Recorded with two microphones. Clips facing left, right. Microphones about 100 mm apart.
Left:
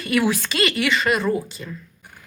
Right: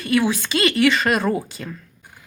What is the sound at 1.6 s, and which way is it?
Speech, 75° right (ahead or behind).